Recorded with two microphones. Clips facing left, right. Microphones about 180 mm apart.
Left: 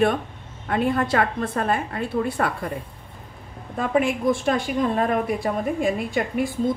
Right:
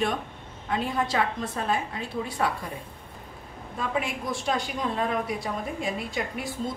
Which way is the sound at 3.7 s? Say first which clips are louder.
Left 8 dB; 55° left (ahead or behind).